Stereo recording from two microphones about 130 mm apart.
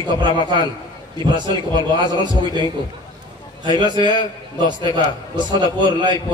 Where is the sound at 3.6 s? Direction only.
35° right (ahead or behind).